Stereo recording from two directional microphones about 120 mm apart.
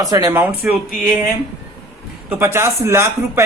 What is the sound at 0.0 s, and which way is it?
Speech, 30° right (ahead or behind).